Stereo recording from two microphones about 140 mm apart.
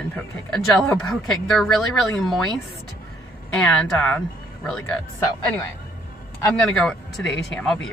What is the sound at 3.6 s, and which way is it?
Speech, 5° left (ahead or behind).